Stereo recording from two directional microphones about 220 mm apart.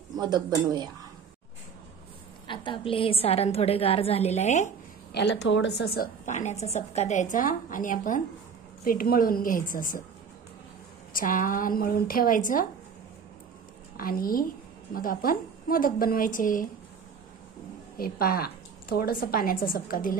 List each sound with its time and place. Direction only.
0.2 s speech: 20° right (ahead or behind)
2.4 s a woman's voice: 20° left (ahead or behind)
5.1 s a woman's voice: 50° left (ahead or behind)
6.3 s a woman's voice: 30° left (ahead or behind)
11.1 s a woman's voice: 40° left (ahead or behind)
13.9 s a woman's voice: 40° left (ahead or behind)
17.9 s a woman's voice: 45° left (ahead or behind)